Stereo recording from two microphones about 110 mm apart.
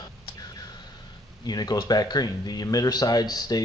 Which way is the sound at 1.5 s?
40° left (ahead or behind).